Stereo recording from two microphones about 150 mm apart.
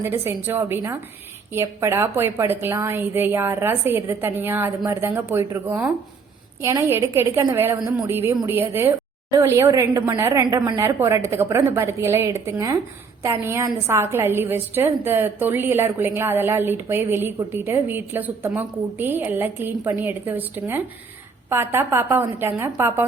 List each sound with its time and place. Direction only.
0.0 s a woman's voice: 15° right (ahead or behind)